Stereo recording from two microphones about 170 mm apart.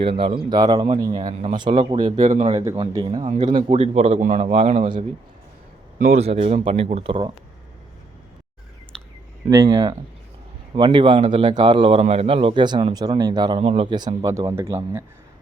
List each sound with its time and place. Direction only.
0.0 s speech: 30° right (ahead or behind)
2.1 s speech: 50° right (ahead or behind)
2.7 s speech: 25° right (ahead or behind)
3.8 s speech: 40° right (ahead or behind)
6.1 s speech: 35° right (ahead or behind)
8.9 s a sound: 5° left (ahead or behind)
9.5 s speech: 20° right (ahead or behind)